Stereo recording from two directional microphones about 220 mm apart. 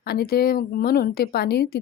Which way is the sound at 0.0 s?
45° left (ahead or behind).